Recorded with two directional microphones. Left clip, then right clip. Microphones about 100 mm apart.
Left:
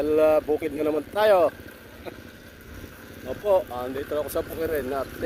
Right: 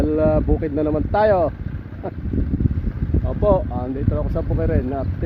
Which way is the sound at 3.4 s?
30° right (ahead or behind).